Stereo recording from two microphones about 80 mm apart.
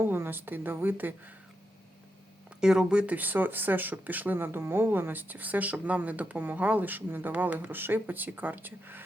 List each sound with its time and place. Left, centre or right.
0.0 s speech: right
2.6 s speech: centre; by 9.0 s right